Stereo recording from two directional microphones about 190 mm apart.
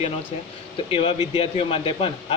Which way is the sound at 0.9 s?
30° left (ahead or behind).